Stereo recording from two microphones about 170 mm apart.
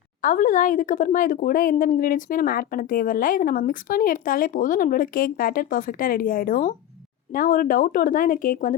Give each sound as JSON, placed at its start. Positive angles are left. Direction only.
{"t": 0.2, "sound": "speech", "side_deg": 50}